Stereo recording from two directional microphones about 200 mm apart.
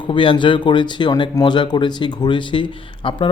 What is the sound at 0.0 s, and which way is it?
Speech, 25° left (ahead or behind).